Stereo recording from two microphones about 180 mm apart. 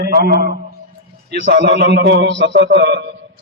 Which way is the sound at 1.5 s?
75° right (ahead or behind).